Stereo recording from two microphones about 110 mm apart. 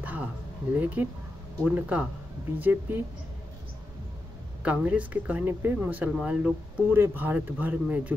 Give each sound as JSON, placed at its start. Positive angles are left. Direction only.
{"t": 0.0, "sound": "a sound", "side_deg": -15}
{"t": 0.7, "sound": "speech", "side_deg": -15}
{"t": 4.6, "sound": "speech", "side_deg": -15}